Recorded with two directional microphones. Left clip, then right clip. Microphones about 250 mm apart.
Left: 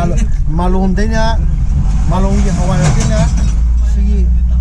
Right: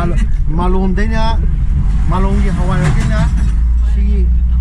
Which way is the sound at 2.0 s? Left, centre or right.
Right.